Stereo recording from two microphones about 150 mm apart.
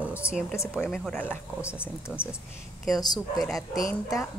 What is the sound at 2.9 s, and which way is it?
Speech, 25° left (ahead or behind).